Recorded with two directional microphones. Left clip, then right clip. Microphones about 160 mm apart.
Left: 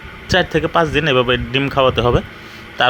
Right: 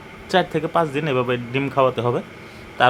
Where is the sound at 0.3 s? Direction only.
15° left (ahead or behind).